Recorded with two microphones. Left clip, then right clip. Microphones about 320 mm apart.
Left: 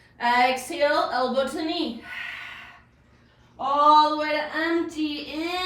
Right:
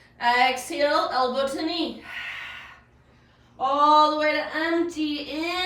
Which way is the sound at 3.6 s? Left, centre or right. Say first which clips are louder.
Even; centre.